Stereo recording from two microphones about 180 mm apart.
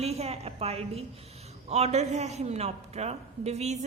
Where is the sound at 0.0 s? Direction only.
35° right (ahead or behind).